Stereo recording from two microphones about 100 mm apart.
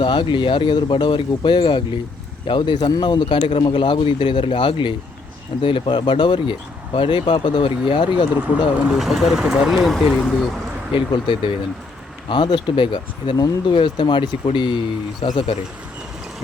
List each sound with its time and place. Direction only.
0.0 s a man's voice: 55° left (ahead or behind)
8.9 s speech: 5° right (ahead or behind)
10.9 s a man's voice: 55° left (ahead or behind)
13.3 s speech: 40° left (ahead or behind)
13.8 s speech: 55° left (ahead or behind)
15.2 s speech: 80° left